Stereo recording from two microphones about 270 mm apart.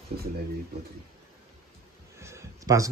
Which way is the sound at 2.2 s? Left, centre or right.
Centre.